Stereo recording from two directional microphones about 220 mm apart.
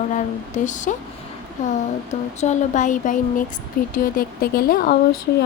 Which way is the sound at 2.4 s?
35° left (ahead or behind).